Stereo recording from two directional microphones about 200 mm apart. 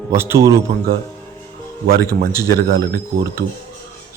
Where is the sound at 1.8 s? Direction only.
50° right (ahead or behind).